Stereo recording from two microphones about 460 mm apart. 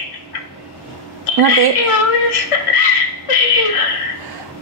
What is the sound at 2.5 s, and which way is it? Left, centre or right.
Speech, left.